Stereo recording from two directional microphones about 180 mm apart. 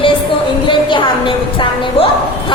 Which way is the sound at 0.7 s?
25° left (ahead or behind).